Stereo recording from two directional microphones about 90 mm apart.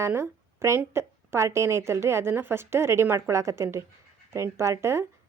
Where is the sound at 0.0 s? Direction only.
30° right (ahead or behind).